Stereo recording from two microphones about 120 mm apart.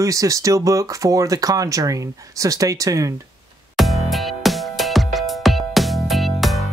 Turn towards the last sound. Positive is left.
turn(degrees=0)  # may be behind; listen again after turning